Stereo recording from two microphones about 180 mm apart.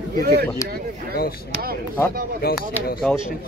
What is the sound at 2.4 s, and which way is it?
Speech, 55° left (ahead or behind).